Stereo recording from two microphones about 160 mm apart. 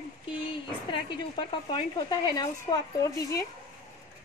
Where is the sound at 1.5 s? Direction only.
30° left (ahead or behind).